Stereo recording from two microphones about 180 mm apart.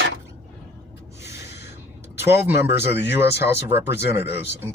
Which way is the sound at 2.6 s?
15° right (ahead or behind).